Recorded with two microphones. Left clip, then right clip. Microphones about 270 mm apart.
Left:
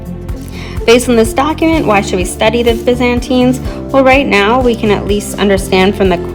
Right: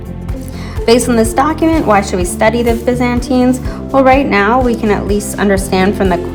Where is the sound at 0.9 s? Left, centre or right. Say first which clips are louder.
Even; left.